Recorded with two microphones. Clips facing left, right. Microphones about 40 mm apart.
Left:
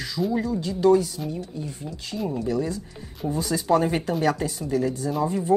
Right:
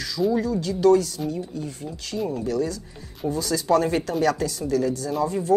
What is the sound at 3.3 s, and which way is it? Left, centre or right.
Speech, left.